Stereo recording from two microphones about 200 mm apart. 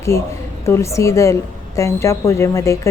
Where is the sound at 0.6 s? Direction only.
15° left (ahead or behind).